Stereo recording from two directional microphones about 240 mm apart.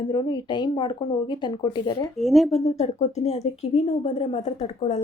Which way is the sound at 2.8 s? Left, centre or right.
Left.